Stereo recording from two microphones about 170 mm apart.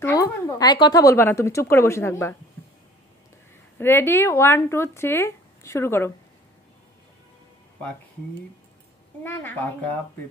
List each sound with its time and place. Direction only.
0.0 s speech: 20° left (ahead or behind)
3.7 s speech: 15° left (ahead or behind)
9.2 s speech: 10° left (ahead or behind)